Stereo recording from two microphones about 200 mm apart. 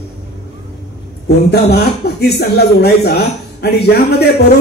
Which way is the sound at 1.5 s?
55° left (ahead or behind).